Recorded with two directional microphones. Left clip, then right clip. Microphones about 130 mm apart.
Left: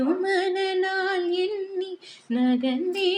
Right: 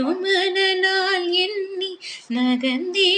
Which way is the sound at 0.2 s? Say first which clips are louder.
Right 5 dB; 55° left (ahead or behind).